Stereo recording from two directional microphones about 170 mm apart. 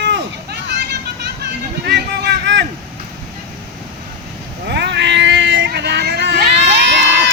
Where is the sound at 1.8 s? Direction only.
80° right.